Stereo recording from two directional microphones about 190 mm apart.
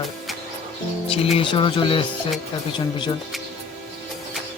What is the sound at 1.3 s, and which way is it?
Speech, 25° left (ahead or behind).